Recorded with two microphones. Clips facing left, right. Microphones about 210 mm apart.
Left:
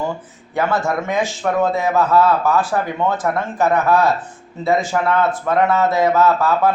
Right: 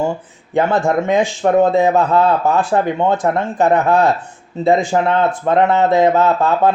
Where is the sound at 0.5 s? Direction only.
30° right (ahead or behind).